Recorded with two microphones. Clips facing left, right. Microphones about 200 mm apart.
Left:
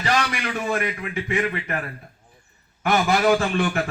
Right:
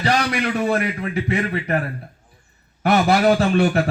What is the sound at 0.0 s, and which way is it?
A man's voice, 35° right (ahead or behind).